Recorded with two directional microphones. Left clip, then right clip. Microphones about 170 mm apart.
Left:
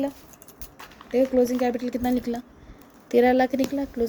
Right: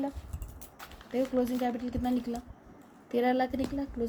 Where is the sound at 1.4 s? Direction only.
45° left (ahead or behind).